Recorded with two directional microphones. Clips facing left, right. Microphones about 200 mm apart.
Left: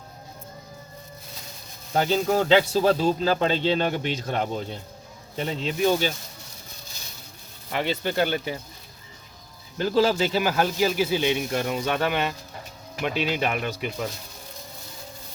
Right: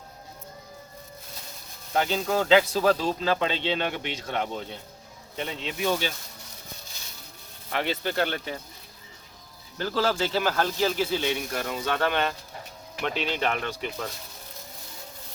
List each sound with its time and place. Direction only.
1.9 s speech: 35° left (ahead or behind)
7.7 s speech: centre (ahead or behind)
9.7 s speech: 15° left (ahead or behind)